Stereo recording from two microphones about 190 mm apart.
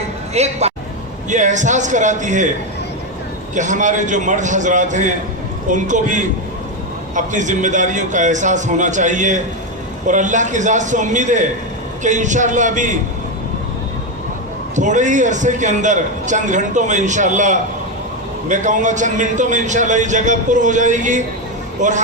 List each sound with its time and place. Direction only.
0.3 s a man's voice: 35° right (ahead or behind)
3.5 s a man's voice: 40° right (ahead or behind)
14.8 s a man's voice: 40° right (ahead or behind)